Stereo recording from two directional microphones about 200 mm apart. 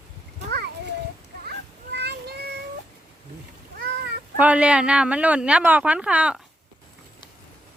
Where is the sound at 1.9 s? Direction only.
55° right (ahead or behind).